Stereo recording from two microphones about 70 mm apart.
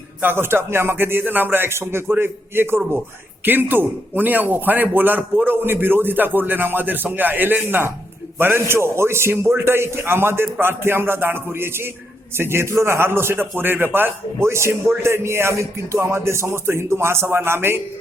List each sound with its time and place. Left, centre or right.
0.2 s a man's voice: right